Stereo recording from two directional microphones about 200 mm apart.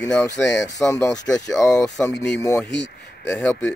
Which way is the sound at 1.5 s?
5° left (ahead or behind).